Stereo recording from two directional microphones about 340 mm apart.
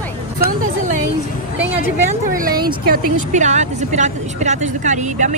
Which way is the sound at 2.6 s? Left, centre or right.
Right.